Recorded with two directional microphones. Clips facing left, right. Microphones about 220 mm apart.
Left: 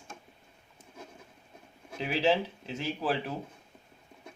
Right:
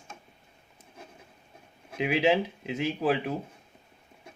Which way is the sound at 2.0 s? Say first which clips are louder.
Right 3 dB; 15° right (ahead or behind).